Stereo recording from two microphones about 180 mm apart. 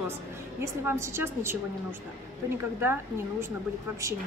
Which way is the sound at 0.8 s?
15° right (ahead or behind).